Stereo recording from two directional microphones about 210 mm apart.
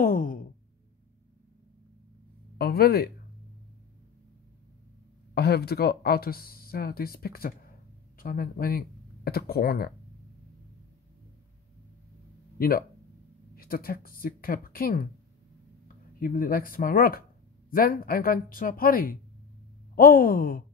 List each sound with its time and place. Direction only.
0.0 s sigh: 40° left (ahead or behind)
2.5 s speech: 45° left (ahead or behind)
5.3 s speech: 50° left (ahead or behind)
12.5 s speech: 45° left (ahead or behind)
16.2 s speech: 45° left (ahead or behind)